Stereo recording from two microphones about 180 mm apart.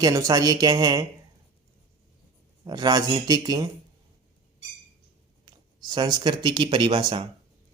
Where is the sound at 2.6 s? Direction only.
25° right (ahead or behind).